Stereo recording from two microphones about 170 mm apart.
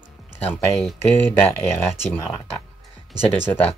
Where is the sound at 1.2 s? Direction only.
10° left (ahead or behind).